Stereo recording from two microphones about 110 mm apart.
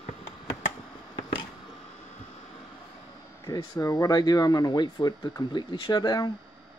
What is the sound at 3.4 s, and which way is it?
Speech, 35° left (ahead or behind).